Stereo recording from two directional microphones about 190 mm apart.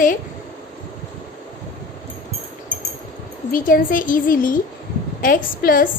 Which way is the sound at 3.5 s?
45° left (ahead or behind).